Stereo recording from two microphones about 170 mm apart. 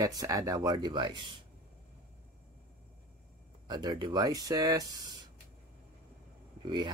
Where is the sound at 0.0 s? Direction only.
20° right (ahead or behind).